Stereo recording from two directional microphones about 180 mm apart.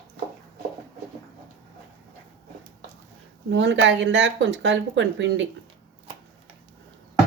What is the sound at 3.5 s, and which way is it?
Speech, 85° right.